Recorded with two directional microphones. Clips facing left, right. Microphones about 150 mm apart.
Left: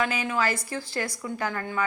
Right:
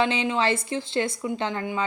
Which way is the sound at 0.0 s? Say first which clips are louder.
Right 3 dB; 25° right (ahead or behind).